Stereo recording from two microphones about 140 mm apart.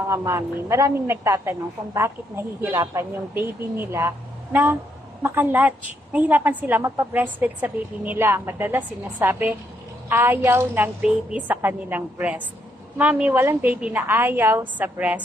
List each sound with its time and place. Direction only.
0.1 s a woman's voice: 20° right (ahead or behind)